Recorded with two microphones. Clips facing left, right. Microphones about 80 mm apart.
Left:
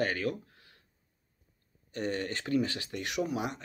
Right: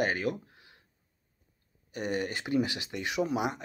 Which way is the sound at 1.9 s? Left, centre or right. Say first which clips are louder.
Right 1 dB; centre.